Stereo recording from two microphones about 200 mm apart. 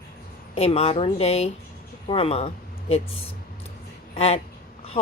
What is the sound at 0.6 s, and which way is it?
A woman's voice, 30° left (ahead or behind).